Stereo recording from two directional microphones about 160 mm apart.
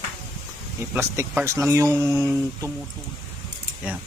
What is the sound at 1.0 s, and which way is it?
Speech, 15° right (ahead or behind).